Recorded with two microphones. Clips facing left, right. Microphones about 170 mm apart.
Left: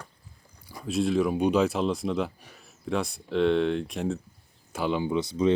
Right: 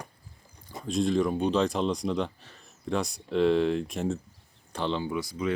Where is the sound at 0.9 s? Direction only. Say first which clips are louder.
Left 1 dB; 5° left (ahead or behind).